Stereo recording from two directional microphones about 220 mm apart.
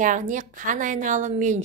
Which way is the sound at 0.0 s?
35° right (ahead or behind).